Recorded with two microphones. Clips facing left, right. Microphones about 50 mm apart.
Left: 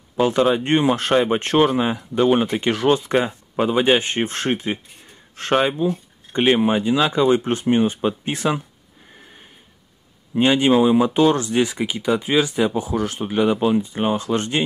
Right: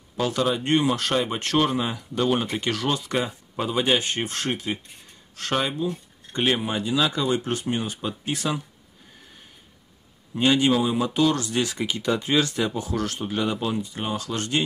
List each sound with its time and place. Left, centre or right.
0.2 s speech: left
10.3 s speech: left